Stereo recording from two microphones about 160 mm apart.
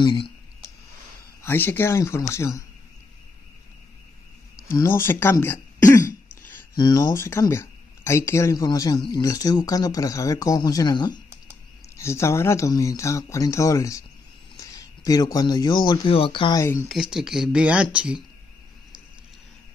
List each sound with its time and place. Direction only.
0.0 s speech: 30° left (ahead or behind)
1.4 s speech: 15° left (ahead or behind)
4.8 s speech: 15° left (ahead or behind)
6.7 s speech: 25° left (ahead or behind)
16.9 s speech: 5° right (ahead or behind)